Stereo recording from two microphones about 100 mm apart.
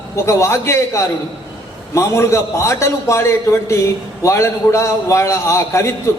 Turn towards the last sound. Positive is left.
turn(degrees=30)  # may be behind; listen again after turning